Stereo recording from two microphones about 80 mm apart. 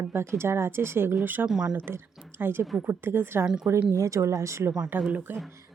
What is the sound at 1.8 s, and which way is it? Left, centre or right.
A woman's voice, right.